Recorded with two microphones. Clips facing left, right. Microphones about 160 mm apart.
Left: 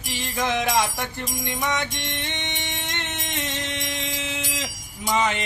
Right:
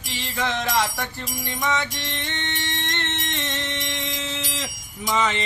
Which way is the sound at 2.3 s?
15° left (ahead or behind).